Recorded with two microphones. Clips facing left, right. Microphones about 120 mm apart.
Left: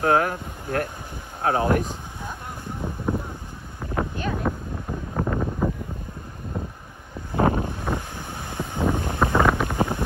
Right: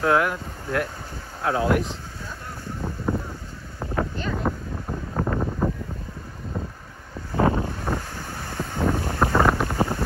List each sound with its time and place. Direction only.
0.0 s speech: 45° left (ahead or behind)
1.9 s a sound: 15° left (ahead or behind)
4.0 s wind noise: 15° left (ahead or behind)
4.5 s wind noise: 5° right (ahead or behind)
5.6 s a sound: 10° left (ahead or behind)
7.3 s wind noise: 20° left (ahead or behind)
9.4 s wind noise: 5° right (ahead or behind)
9.7 s wind noise: 15° left (ahead or behind)